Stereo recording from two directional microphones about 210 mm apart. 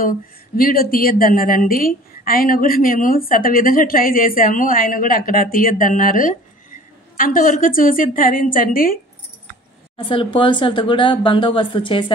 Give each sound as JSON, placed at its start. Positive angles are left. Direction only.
{"t": 0.6, "sound": "a woman's voice", "side_deg": 45}
{"t": 9.9, "sound": "speech", "side_deg": 25}